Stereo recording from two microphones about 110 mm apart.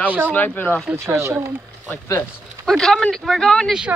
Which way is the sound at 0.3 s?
15° left (ahead or behind).